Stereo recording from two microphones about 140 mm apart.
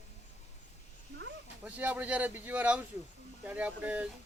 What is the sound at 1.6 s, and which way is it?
Speech, 10° right (ahead or behind).